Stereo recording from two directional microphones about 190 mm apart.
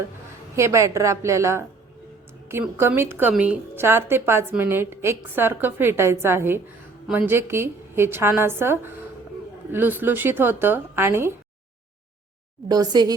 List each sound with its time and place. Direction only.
0.5 s a woman's voice: 15° right (ahead or behind)
12.6 s a woman's voice: 20° right (ahead or behind)